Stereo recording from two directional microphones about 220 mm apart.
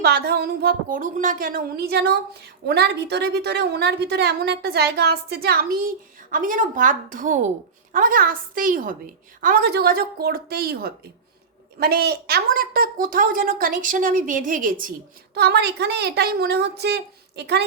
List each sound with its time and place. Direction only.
0.0 s a woman's voice: 45° right (ahead or behind)
15.4 s a woman's voice: 50° right (ahead or behind)